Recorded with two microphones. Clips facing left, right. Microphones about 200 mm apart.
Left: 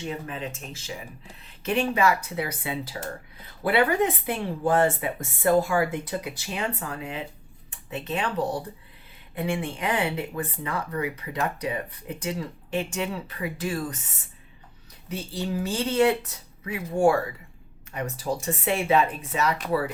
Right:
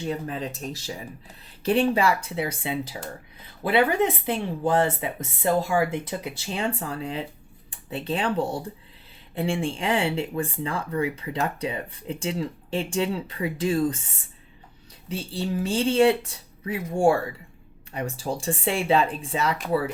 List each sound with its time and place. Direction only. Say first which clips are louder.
0.1 s speech: right 3 dB; 35° right (ahead or behind)
15.1 s speech: right 1 dB; 30° right (ahead or behind)